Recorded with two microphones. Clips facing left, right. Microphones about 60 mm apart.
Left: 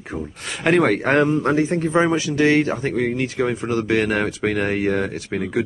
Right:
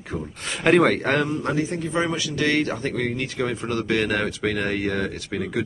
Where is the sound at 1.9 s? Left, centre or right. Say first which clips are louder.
Left 6 dB; left.